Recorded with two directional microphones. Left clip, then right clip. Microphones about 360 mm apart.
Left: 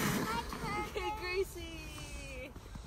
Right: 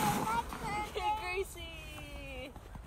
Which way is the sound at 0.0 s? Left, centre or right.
Centre.